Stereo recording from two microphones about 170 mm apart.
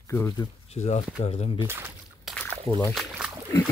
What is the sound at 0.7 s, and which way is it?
Speech, 40° left (ahead or behind).